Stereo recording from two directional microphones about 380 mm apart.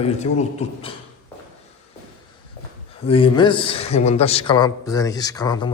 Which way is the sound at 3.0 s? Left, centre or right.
Centre.